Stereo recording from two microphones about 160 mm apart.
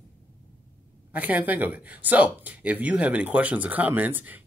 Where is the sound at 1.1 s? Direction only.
10° right (ahead or behind).